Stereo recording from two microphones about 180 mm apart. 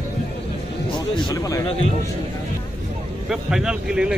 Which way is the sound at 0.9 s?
25° left (ahead or behind).